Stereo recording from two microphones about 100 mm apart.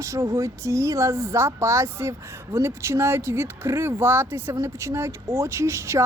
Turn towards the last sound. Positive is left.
turn(degrees=-30)  # may be behind; listen again after turning